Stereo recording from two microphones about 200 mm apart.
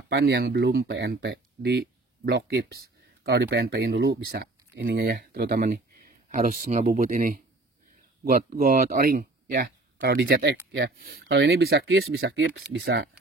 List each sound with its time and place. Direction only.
0.1 s speech: 55° right (ahead or behind)
8.5 s speech: 45° right (ahead or behind)